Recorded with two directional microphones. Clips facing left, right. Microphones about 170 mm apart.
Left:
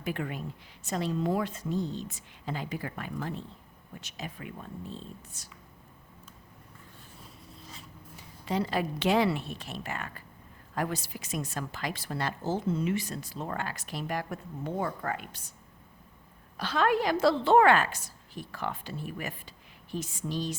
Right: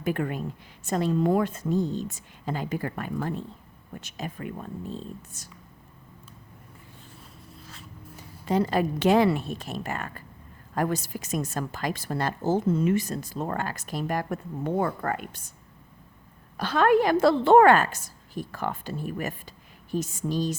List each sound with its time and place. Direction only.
0.0 s a woman's voice: 50° right (ahead or behind)
7.4 s a sound: centre (ahead or behind)
8.1 s a woman's voice: 45° right (ahead or behind)
16.6 s a woman's voice: 50° right (ahead or behind)